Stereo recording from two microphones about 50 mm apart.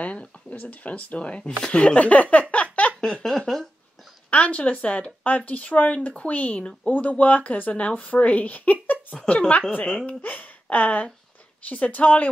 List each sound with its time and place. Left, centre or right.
0.0 s speech: left
2.5 s a sound: left
3.0 s a sound: centre
4.3 s speech: left
9.3 s speech: left
10.0 s speech: left